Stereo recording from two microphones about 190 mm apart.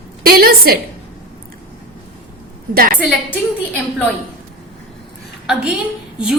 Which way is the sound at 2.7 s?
50° right (ahead or behind).